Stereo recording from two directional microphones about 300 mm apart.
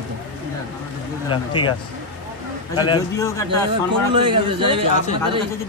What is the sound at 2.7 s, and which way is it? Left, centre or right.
Speech, centre.